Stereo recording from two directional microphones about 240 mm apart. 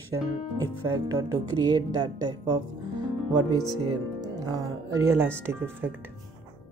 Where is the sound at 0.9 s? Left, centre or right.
Centre.